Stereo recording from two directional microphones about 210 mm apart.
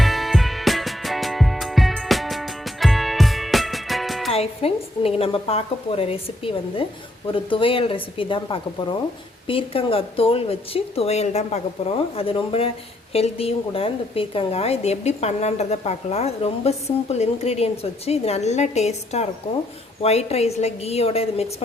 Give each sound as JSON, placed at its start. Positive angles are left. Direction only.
{"t": 0.0, "sound": "music", "side_deg": 0}
{"t": 4.3, "sound": "a woman's voice", "side_deg": 30}